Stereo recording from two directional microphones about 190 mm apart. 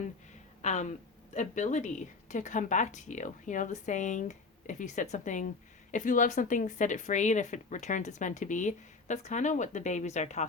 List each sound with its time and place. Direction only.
0.6 s speech: 40° left (ahead or behind)